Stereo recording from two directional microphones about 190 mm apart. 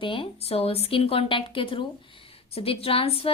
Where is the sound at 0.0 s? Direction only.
25° left (ahead or behind).